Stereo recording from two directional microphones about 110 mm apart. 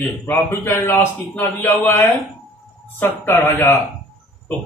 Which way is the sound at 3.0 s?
20° left (ahead or behind).